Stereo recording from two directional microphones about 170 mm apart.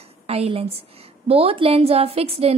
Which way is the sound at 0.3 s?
35° right (ahead or behind).